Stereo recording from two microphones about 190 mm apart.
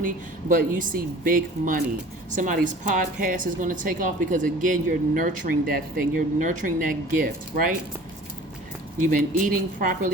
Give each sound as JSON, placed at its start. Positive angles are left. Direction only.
{"t": 0.0, "sound": "speech", "side_deg": -45}
{"t": 9.0, "sound": "speech", "side_deg": -45}